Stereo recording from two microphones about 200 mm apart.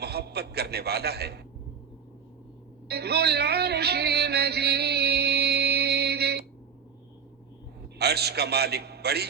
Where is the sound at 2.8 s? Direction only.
55° right (ahead or behind).